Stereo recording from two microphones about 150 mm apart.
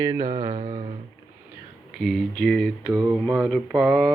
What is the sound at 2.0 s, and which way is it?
Mantra, centre (ahead or behind).